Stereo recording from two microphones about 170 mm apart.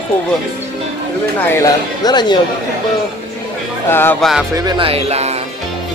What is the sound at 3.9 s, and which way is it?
Speech, 10° left (ahead or behind).